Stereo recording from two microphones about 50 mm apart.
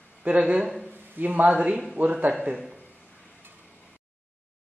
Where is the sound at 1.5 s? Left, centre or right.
Right.